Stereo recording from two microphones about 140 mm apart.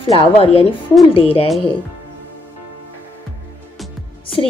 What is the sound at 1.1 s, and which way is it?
Child singing, 40° left (ahead or behind).